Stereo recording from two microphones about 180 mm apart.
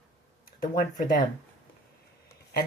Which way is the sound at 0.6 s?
50° left (ahead or behind).